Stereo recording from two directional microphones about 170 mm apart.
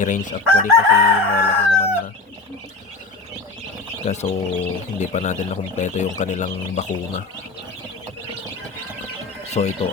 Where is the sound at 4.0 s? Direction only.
40° left (ahead or behind).